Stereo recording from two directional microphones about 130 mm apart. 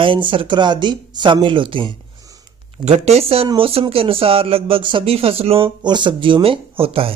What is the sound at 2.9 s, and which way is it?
Speech, 55° right (ahead or behind).